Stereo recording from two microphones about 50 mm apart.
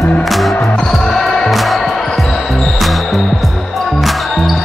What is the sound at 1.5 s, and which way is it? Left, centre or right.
Music, centre.